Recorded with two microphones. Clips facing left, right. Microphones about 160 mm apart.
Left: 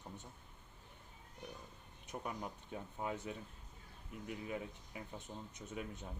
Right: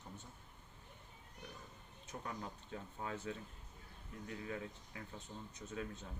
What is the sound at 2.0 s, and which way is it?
Speech, 15° left (ahead or behind).